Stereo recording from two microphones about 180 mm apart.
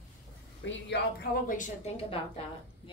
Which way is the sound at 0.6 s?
90° left.